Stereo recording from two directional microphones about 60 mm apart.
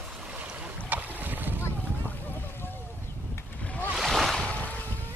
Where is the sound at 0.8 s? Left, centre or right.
Right.